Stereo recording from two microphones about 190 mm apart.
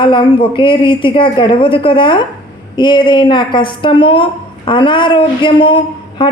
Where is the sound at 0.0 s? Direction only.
25° left (ahead or behind).